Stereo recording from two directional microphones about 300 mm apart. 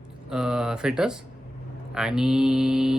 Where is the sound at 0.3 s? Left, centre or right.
Centre.